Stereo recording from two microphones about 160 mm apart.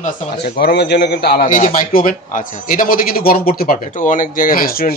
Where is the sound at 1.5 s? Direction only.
50° left (ahead or behind).